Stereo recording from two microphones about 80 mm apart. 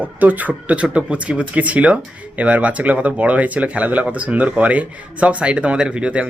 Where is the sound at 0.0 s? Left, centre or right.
Right.